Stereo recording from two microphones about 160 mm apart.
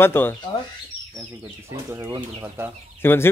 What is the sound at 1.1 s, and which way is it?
Speech, 15° right (ahead or behind).